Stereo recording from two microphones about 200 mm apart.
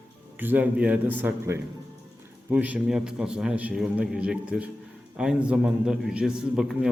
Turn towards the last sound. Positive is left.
turn(degrees=-5)  # may be behind; listen again after turning